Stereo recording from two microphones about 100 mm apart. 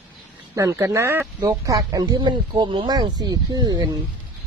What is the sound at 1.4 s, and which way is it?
Speech, 40° right (ahead or behind).